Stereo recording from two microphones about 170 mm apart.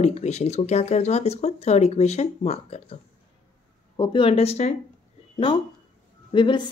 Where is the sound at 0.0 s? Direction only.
40° left (ahead or behind).